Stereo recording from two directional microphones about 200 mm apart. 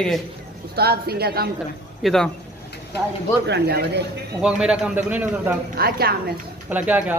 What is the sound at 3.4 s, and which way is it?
Speech, 55° right (ahead or behind).